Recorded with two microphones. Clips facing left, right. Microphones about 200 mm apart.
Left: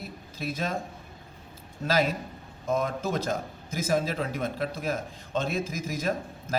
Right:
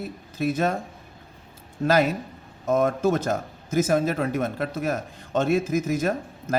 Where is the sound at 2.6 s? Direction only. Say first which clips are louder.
Right 7 dB; 55° right (ahead or behind).